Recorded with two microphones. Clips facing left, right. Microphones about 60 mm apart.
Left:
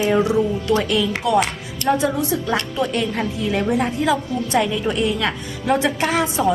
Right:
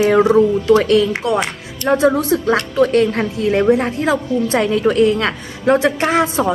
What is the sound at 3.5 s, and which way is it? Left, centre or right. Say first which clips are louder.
A woman's voice: right 7 dB; right.